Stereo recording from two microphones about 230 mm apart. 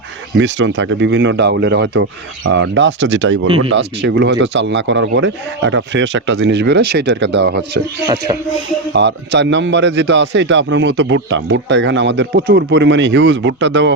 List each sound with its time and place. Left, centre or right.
0.3 s speech: right
8.0 s music: centre
8.9 s speech: right